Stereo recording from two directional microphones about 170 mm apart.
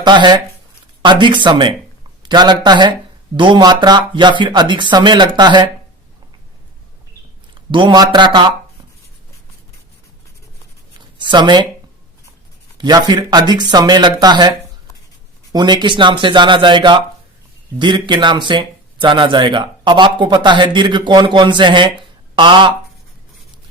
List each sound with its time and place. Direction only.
0.0 s speech: 25° right (ahead or behind)
7.7 s speech: 25° right (ahead or behind)
11.2 s speech: 25° right (ahead or behind)
12.7 s speech: 25° right (ahead or behind)
15.5 s speech: 25° right (ahead or behind)